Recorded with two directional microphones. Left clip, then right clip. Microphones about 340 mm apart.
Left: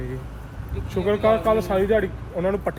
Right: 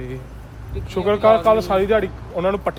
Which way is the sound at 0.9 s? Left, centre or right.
Centre.